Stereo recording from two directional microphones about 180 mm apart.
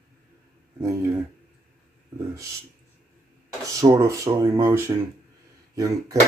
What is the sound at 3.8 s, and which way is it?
Speech, 15° right (ahead or behind).